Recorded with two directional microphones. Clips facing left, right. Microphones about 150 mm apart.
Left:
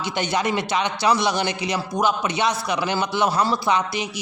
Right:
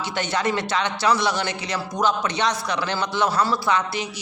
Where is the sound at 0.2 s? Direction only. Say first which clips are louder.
Left 1 dB; 15° left (ahead or behind).